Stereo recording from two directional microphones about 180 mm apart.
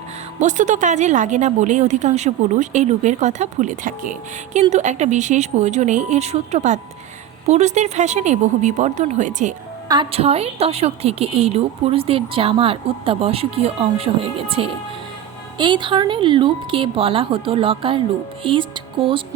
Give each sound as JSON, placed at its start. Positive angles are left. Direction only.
{"t": 0.3, "sound": "a woman's voice", "side_deg": -40}
{"t": 9.9, "sound": "a woman's voice", "side_deg": -30}